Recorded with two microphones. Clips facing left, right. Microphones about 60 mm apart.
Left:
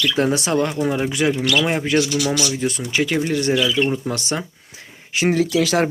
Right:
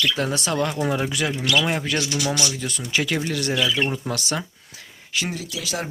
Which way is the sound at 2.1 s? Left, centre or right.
Right.